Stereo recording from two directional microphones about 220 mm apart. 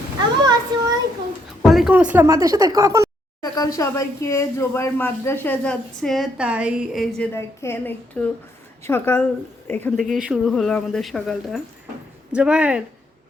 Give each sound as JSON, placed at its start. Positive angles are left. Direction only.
{"t": 0.7, "sound": "a sound", "side_deg": -20}
{"t": 1.6, "sound": "speech", "side_deg": 0}
{"t": 3.4, "sound": "a woman's voice", "side_deg": 15}